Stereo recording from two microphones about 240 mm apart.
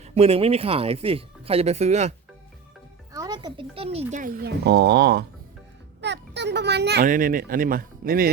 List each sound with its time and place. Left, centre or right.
0.0 s speech: right
3.1 s a child's voice: centre; by 8.3 s right